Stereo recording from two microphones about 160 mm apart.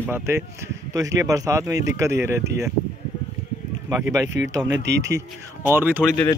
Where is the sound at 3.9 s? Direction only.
15° right (ahead or behind).